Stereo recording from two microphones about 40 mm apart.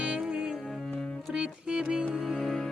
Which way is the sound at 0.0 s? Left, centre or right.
Right.